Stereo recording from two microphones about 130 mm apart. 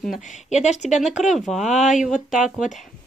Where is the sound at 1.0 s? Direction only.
Centre (ahead or behind).